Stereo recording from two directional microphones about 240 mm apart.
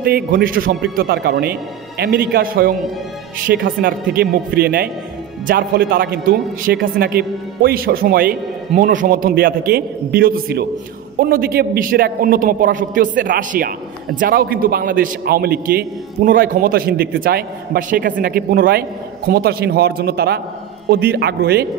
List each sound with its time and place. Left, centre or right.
0.0 s a man's voice: right